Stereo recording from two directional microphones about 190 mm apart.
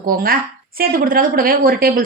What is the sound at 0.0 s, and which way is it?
Speech, 50° right (ahead or behind).